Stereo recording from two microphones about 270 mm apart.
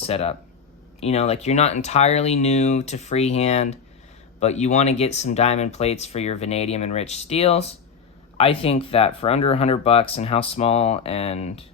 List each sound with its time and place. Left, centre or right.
0.0 s speech: left